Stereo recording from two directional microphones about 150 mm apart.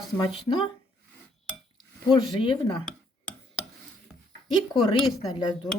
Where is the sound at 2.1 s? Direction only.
35° left (ahead or behind).